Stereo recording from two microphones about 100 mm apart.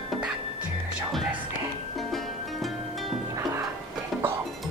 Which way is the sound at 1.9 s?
Centre (ahead or behind).